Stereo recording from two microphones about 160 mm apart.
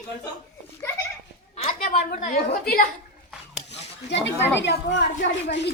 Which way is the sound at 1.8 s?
60° left (ahead or behind).